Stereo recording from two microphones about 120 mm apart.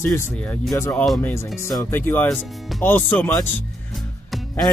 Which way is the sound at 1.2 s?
20° left (ahead or behind).